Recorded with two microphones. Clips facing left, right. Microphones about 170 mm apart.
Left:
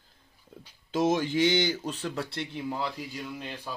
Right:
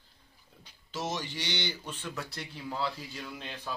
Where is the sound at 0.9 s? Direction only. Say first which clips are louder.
Left 10 dB; 55° left (ahead or behind); by 3.2 s 15° left (ahead or behind).